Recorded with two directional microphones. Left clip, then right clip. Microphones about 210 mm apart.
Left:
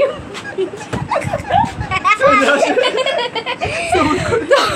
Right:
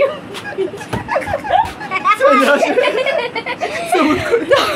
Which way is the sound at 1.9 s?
45° left (ahead or behind).